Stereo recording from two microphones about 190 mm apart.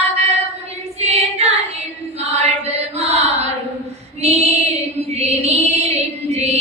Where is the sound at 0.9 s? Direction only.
35° right (ahead or behind).